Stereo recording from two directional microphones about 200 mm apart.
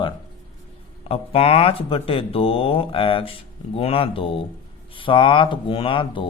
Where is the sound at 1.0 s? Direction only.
30° left (ahead or behind).